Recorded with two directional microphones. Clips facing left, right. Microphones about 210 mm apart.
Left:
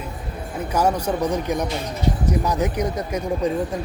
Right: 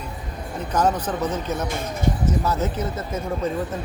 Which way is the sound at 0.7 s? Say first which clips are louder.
Left 1 dB; 10° left (ahead or behind).